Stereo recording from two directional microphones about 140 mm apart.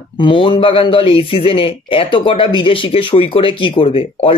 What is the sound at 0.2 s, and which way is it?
Speech, 35° left (ahead or behind).